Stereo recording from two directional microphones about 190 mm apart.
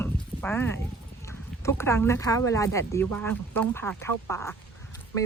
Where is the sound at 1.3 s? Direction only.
15° left (ahead or behind).